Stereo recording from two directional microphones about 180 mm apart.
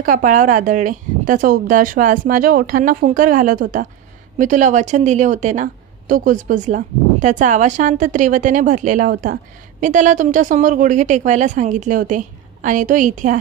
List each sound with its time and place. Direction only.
0.0 s a woman's voice: 50° right (ahead or behind)